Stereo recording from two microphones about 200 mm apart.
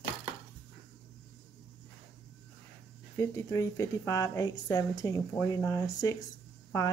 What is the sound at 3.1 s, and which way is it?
A woman's voice, 15° left (ahead or behind).